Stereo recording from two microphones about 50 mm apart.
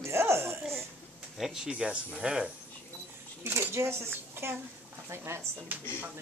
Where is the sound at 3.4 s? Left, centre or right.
Right.